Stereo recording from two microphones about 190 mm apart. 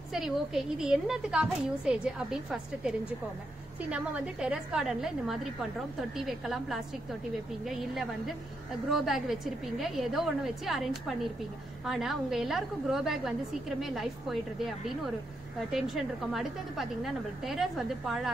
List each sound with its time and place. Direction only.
0.1 s a woman's voice: centre (ahead or behind)
3.9 s a woman's voice: 5° right (ahead or behind)